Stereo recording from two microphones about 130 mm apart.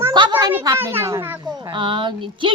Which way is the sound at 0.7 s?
20° right (ahead or behind).